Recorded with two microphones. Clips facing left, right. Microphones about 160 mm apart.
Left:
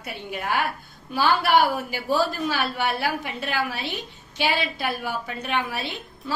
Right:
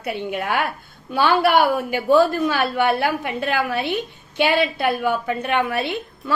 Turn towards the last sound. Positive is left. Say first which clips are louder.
# right 8 dB
turn(degrees=-60)  # may be behind; listen again after turning